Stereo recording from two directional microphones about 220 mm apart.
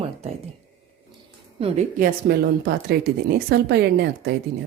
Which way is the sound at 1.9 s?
45° right (ahead or behind).